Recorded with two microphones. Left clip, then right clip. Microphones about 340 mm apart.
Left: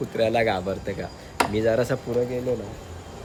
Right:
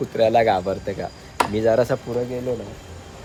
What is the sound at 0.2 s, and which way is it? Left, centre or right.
Speech, centre.